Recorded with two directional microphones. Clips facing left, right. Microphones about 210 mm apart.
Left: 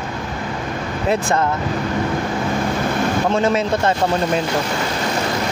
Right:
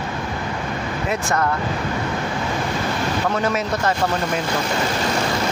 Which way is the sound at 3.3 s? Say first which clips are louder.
Left 4 dB; 25° left (ahead or behind).